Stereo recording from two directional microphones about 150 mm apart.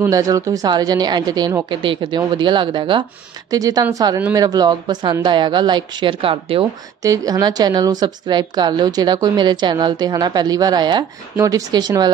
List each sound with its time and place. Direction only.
0.0 s speech: 20° right (ahead or behind)
7.0 s speech: 25° right (ahead or behind)